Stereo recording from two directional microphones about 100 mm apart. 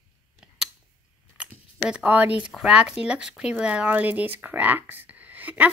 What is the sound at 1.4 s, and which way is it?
Speech, 10° right (ahead or behind).